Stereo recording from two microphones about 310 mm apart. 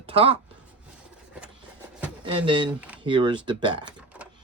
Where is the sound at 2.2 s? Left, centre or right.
Centre.